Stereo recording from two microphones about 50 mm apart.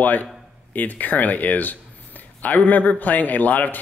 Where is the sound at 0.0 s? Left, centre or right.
Left.